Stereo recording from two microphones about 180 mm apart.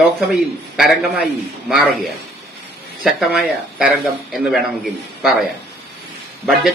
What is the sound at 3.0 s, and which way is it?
A man's voice, 5° right (ahead or behind).